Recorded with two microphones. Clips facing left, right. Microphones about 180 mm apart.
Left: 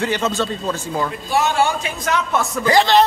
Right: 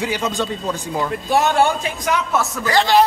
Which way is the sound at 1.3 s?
55° right (ahead or behind).